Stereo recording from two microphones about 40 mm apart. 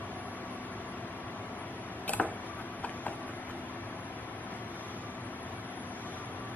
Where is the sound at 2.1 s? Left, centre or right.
Left.